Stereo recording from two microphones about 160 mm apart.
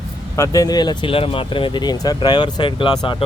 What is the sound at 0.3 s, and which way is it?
Speech, 20° left (ahead or behind).